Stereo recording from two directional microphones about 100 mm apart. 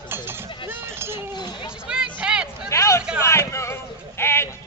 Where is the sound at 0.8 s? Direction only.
25° right (ahead or behind).